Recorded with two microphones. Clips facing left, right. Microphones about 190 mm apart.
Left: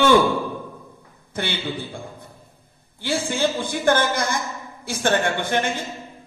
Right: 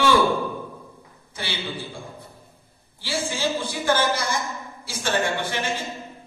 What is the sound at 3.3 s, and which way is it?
A man's voice, 55° left (ahead or behind).